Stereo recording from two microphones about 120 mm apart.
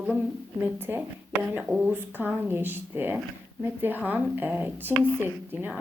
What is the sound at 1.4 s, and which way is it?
A woman's voice, 10° right (ahead or behind).